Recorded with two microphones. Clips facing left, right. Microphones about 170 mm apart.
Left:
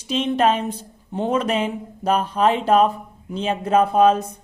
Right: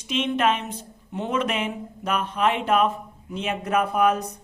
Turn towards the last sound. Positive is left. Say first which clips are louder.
# left 6 dB
turn(degrees=25)  # may be behind; listen again after turning